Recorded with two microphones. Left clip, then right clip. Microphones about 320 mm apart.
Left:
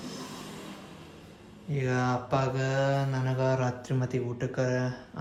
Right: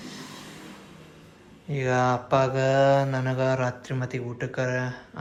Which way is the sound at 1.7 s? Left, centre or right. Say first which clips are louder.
Right 6 dB; centre.